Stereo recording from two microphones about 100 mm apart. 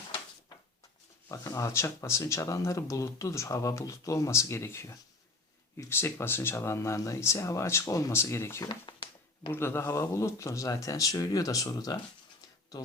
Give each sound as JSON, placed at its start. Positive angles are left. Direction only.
{"t": 1.3, "sound": "speech", "side_deg": 35}
{"t": 8.7, "sound": "a sound", "side_deg": 50}
{"t": 9.5, "sound": "speech", "side_deg": 25}